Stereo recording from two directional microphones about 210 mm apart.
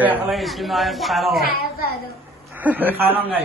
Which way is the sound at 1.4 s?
45° left (ahead or behind).